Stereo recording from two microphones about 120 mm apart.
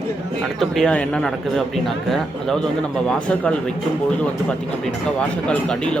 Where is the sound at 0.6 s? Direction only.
5° left (ahead or behind).